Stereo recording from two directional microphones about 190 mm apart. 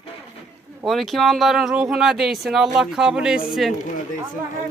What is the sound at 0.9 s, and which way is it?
Speech, centre (ahead or behind).